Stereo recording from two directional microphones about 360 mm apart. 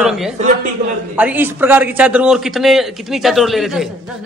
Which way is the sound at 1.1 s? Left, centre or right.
Centre.